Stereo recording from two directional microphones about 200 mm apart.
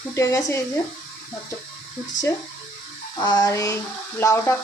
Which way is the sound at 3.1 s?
20° left (ahead or behind).